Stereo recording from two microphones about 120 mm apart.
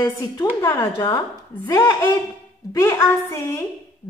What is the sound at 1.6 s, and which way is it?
A woman's voice, 30° left (ahead or behind).